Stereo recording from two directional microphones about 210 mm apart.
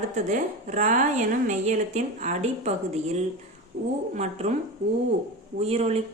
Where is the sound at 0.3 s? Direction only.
35° right (ahead or behind).